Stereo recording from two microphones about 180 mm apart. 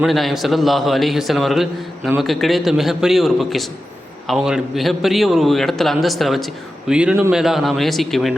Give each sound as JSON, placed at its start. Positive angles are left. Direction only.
{"t": 0.0, "sound": "a man's voice", "side_deg": 0}